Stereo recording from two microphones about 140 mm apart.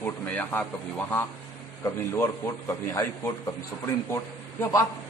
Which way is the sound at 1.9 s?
20° left (ahead or behind).